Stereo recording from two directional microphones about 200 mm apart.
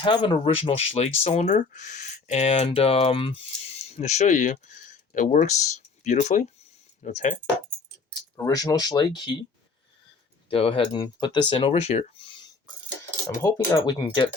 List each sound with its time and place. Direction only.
0.0 s speech: 25° left (ahead or behind)
8.4 s speech: 20° left (ahead or behind)
10.5 s speech: 25° left (ahead or behind)